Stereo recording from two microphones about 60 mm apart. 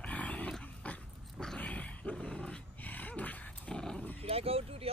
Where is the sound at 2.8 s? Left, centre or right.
Left.